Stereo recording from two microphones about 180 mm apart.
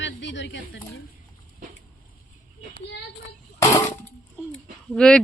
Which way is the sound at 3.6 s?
15° left (ahead or behind).